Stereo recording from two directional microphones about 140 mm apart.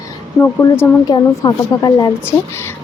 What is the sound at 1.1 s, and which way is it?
A woman's voice, 30° left (ahead or behind).